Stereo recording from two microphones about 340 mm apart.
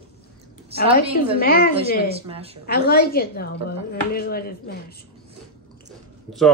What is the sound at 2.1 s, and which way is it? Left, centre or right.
Speech, centre.